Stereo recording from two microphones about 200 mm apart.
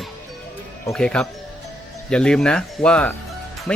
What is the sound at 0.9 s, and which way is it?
Speech, 5° left (ahead or behind).